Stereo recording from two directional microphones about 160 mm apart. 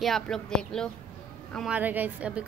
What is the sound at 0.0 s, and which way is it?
Speech, centre (ahead or behind).